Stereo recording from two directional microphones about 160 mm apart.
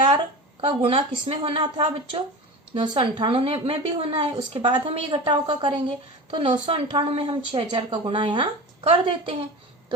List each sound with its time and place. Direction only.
0.6 s a woman's voice: 35° right (ahead or behind)